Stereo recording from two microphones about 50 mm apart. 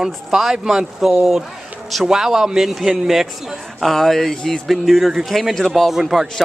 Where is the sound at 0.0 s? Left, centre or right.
Centre.